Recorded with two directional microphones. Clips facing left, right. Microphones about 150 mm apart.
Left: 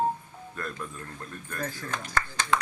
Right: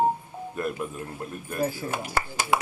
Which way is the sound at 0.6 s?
15° right (ahead or behind).